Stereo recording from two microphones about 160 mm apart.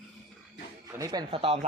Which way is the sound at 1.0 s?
25° right (ahead or behind).